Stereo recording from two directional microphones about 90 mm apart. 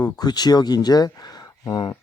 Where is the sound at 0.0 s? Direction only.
50° left (ahead or behind).